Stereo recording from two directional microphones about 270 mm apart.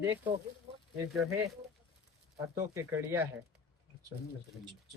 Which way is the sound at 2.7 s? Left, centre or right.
Centre.